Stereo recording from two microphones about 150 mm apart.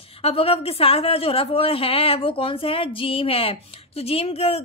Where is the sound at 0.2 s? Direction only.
40° left (ahead or behind).